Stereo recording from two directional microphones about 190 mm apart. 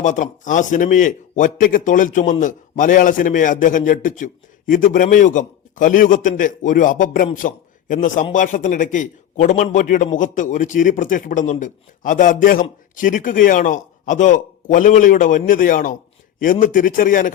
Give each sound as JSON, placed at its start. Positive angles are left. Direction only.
{"t": 0.0, "sound": "a man's voice", "side_deg": 40}